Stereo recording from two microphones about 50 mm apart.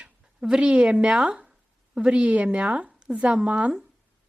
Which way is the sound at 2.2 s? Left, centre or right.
Right.